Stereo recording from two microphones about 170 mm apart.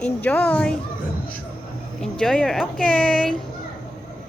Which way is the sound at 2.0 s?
5° left (ahead or behind).